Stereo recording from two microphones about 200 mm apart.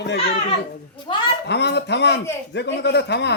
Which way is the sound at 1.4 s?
55° left (ahead or behind).